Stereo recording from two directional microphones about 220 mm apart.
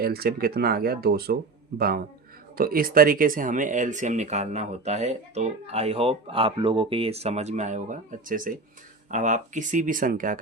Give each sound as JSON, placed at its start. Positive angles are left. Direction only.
{"t": 0.0, "sound": "speech", "side_deg": -45}